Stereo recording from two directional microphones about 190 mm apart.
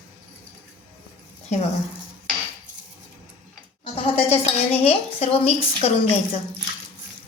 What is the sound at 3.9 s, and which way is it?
Dishes, 30° left (ahead or behind).